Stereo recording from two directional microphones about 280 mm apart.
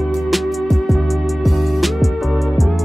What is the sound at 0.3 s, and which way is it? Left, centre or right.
Music, centre.